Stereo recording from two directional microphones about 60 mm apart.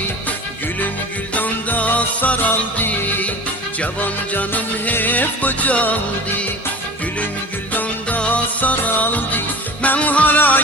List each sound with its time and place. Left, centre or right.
1.3 s music: left
7.7 s music: left